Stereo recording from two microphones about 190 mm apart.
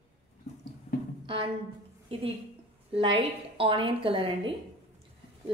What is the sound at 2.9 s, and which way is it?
A woman's voice, 25° right (ahead or behind).